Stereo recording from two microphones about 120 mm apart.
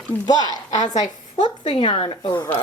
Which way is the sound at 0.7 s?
80° left.